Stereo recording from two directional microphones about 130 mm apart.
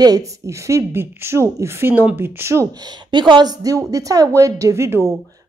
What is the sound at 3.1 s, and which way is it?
A woman's voice, 35° right (ahead or behind).